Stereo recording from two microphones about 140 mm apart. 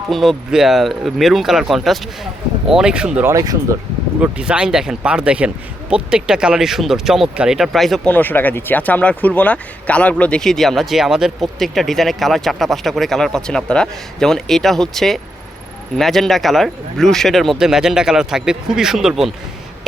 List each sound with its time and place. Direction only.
0.1 s speech: centre (ahead or behind)
3.2 s speech: 25° right (ahead or behind)
4.2 s speech: 10° right (ahead or behind)
8.1 s speech: 15° left (ahead or behind)